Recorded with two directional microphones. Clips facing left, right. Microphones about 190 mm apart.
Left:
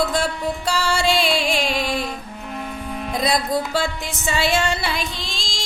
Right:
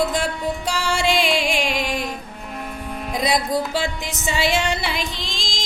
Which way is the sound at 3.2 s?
15° right (ahead or behind).